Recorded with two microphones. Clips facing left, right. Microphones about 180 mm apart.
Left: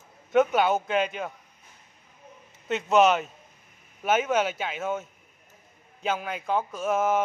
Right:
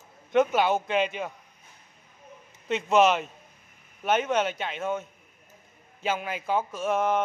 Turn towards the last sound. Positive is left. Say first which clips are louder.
# left 1 dB
turn(degrees=0)  # may be behind; listen again after turning